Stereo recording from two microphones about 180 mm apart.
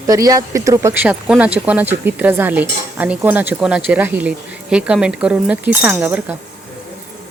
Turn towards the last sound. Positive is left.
turn(degrees=-10)  # may be behind; listen again after turning